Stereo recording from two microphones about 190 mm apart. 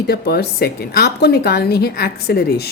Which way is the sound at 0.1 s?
55° left (ahead or behind).